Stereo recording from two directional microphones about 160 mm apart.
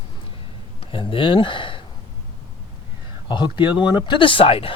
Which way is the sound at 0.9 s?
35° left (ahead or behind).